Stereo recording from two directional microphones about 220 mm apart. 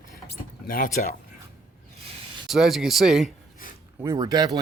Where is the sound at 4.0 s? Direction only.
15° right (ahead or behind).